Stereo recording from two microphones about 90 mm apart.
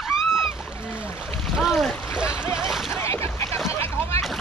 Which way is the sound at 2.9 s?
30° left (ahead or behind).